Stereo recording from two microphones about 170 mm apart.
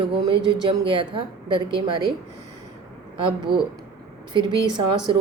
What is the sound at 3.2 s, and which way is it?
A woman's voice, 30° right (ahead or behind).